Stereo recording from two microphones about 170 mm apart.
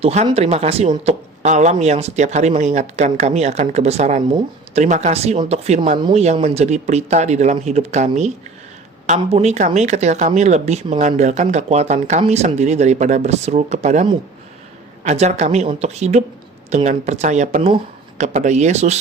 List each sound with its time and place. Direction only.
0.0 s speech: 40° right (ahead or behind)